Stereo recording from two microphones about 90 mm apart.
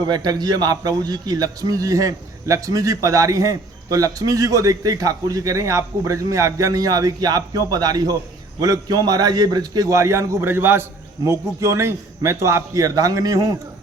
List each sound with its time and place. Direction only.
0.0 s a man's voice: 50° right (ahead or behind)